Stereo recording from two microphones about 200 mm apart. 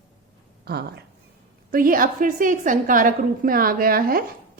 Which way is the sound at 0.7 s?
55° right (ahead or behind).